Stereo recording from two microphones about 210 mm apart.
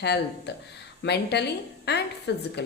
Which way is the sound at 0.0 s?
55° left (ahead or behind).